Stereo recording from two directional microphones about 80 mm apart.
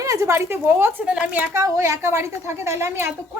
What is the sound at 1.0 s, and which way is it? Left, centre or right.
Speech, centre.